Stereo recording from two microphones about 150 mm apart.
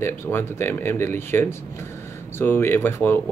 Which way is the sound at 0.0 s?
15° left (ahead or behind).